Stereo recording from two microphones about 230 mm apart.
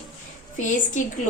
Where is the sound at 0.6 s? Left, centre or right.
Left.